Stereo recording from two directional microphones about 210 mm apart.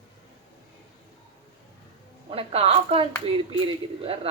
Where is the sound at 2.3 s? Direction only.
30° right (ahead or behind).